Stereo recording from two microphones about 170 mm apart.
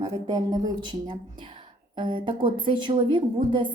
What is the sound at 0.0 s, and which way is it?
A woman's voice, 20° right (ahead or behind).